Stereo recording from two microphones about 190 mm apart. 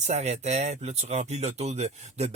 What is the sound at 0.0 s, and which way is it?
Speech, 35° right (ahead or behind).